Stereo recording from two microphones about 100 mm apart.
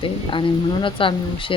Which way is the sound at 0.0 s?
55° left (ahead or behind).